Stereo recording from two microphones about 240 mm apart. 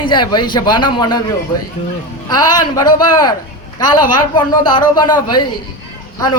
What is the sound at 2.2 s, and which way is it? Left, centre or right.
A man's voice, centre.